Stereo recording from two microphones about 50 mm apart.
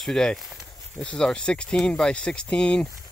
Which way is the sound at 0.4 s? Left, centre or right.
Centre.